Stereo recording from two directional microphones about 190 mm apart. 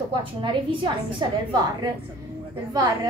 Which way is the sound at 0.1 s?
25° right (ahead or behind).